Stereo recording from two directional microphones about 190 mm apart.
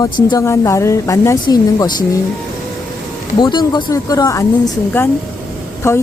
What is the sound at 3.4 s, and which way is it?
A woman's voice, 25° left (ahead or behind).